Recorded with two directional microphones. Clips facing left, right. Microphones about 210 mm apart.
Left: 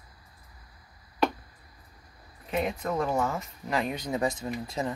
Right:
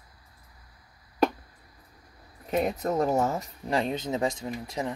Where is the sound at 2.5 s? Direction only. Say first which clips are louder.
Right 3 dB; 40° right (ahead or behind); by 4.9 s 15° right (ahead or behind).